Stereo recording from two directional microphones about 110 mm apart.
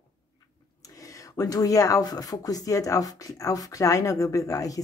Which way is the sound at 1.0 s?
30° left (ahead or behind).